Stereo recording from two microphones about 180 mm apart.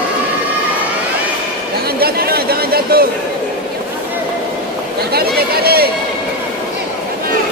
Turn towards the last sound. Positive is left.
turn(degrees=-60)  # may be behind; listen again after turning